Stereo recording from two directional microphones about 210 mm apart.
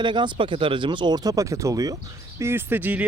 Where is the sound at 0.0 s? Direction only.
20° right (ahead or behind).